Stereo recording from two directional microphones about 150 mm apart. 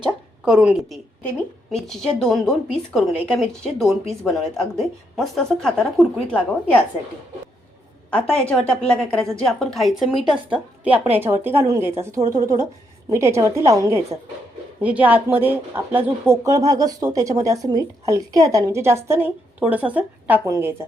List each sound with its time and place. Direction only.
0.0 s a sound: 5° right (ahead or behind)
1.7 s a woman's voice: centre (ahead or behind)
8.1 s a woman's voice: 10° left (ahead or behind); by 14.2 s 20° right (ahead or behind)
14.8 s speech: 10° right (ahead or behind)